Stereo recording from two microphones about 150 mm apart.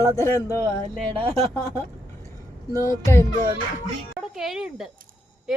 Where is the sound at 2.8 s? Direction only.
20° left (ahead or behind).